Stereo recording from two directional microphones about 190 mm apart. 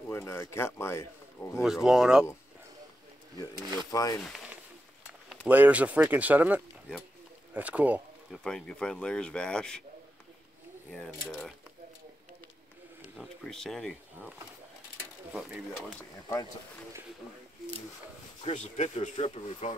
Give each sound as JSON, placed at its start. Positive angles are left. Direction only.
{"t": 0.1, "sound": "speech", "side_deg": 15}
{"t": 1.6, "sound": "speech", "side_deg": 0}
{"t": 3.9, "sound": "speech", "side_deg": 20}
{"t": 5.5, "sound": "speech", "side_deg": -10}
{"t": 8.5, "sound": "speech", "side_deg": 5}
{"t": 10.9, "sound": "speech", "side_deg": 0}
{"t": 13.2, "sound": "speech", "side_deg": 5}
{"t": 15.3, "sound": "speech", "side_deg": -5}
{"t": 16.0, "sound": "speech", "side_deg": 15}
{"t": 18.4, "sound": "speech", "side_deg": 40}